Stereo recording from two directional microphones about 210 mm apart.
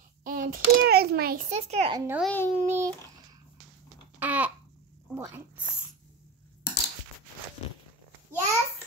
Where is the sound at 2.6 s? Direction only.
10° right (ahead or behind).